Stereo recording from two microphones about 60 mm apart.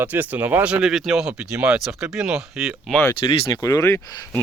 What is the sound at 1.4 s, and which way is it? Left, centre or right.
Speech, centre.